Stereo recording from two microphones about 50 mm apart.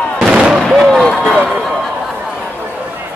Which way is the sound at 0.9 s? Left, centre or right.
Left.